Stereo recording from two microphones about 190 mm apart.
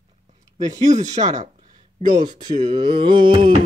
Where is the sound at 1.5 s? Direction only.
40° right (ahead or behind).